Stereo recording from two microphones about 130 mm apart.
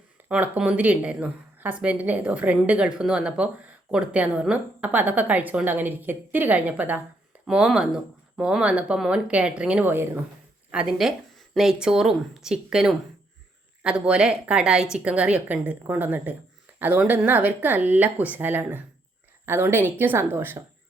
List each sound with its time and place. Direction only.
0.3 s speech: 10° right (ahead or behind)